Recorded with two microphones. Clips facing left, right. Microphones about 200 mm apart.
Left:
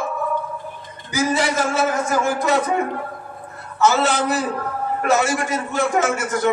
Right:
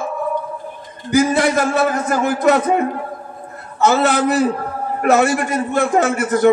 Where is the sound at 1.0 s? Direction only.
55° right (ahead or behind).